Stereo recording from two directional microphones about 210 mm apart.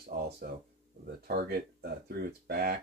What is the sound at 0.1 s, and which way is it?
Speech, 45° right (ahead or behind).